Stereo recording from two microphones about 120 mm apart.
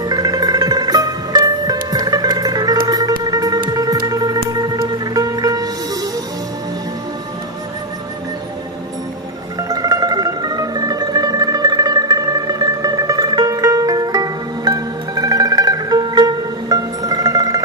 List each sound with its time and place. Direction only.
0.0 s music: 30° right (ahead or behind)
9.6 s music: 30° right (ahead or behind)